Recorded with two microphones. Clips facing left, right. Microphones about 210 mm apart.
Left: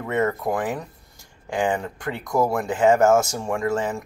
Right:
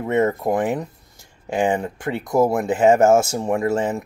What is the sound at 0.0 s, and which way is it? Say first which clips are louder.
Speech: right 4 dB; 25° right (ahead or behind).